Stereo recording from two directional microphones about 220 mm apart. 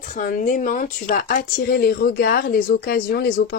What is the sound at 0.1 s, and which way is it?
Speech, 35° left (ahead or behind).